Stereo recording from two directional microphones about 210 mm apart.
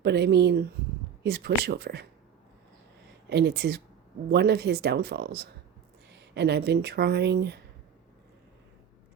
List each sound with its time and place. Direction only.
0.0 s speech: 55° right (ahead or behind)
3.2 s speech: 55° right (ahead or behind)